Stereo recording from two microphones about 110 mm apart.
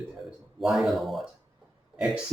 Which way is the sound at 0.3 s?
Centre (ahead or behind).